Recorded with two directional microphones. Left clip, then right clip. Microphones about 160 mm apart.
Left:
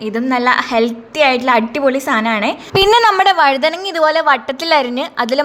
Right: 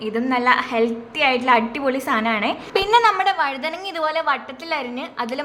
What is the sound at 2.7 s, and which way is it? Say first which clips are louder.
A woman's voice: left 6 dB; 80° left.